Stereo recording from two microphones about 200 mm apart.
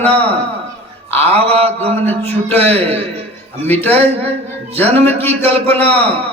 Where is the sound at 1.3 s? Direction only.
30° right (ahead or behind).